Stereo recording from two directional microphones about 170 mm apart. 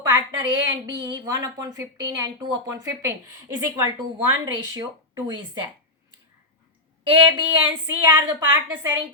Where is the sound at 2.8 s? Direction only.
15° right (ahead or behind).